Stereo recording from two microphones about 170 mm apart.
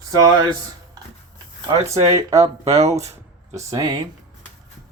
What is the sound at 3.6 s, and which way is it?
Speech, 20° right (ahead or behind).